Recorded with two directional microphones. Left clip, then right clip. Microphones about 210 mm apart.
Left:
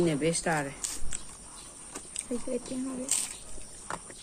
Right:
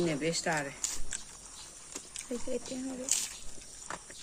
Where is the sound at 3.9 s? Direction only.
15° left (ahead or behind).